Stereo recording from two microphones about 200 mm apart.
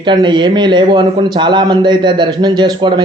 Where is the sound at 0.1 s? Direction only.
25° right (ahead or behind).